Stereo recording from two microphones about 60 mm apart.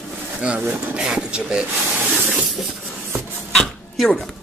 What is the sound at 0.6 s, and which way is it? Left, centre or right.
Speech, right.